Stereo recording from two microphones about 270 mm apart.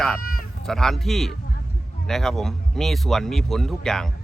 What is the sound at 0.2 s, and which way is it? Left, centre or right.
Bleat, left.